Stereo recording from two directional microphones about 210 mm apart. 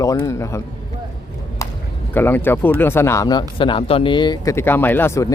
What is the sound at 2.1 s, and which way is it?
Speech, 10° left (ahead or behind).